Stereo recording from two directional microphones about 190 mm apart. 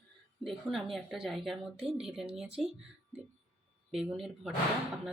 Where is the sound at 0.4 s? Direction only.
Centre (ahead or behind).